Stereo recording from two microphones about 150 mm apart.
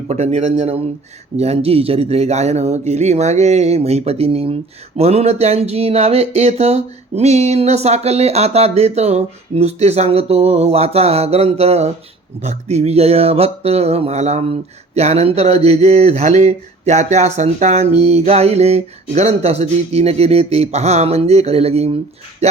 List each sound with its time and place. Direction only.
0.1 s speech: 45° right (ahead or behind)